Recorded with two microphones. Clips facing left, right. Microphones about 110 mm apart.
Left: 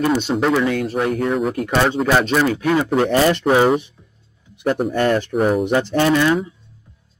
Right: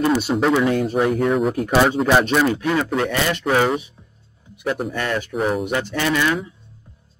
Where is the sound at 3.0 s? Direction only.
35° left (ahead or behind).